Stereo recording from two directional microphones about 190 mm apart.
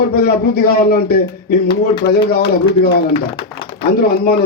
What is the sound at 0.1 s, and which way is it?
A man's voice, 50° left (ahead or behind).